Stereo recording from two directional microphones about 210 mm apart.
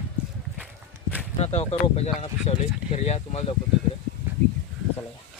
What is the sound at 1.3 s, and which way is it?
Speech, 30° left (ahead or behind).